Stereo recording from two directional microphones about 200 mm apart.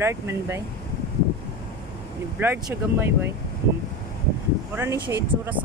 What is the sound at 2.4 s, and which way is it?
Speech, 10° right (ahead or behind).